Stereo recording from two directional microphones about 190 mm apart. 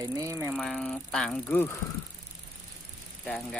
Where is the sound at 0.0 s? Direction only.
20° right (ahead or behind).